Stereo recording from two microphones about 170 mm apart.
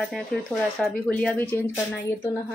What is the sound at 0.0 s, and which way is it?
Speech, 5° left (ahead or behind).